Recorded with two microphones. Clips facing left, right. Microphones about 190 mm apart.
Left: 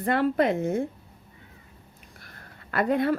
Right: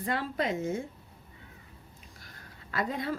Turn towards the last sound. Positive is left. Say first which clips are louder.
# left 9 dB
turn(degrees=60)  # may be behind; listen again after turning